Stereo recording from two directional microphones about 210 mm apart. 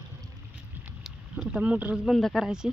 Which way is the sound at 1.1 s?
5° right (ahead or behind).